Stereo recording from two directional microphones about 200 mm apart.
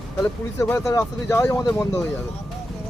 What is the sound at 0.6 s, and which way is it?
Speech, 15° left (ahead or behind).